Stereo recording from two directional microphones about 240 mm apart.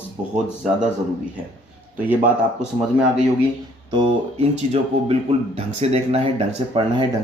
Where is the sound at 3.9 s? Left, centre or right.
Right.